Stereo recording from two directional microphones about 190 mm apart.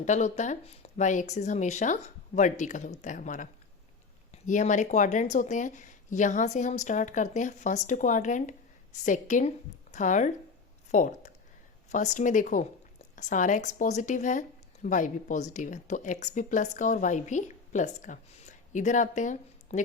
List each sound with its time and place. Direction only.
0.0 s a woman's voice: 40° left (ahead or behind)